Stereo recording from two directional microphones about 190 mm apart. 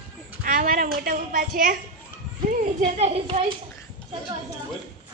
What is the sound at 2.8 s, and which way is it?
Speech, 35° right (ahead or behind).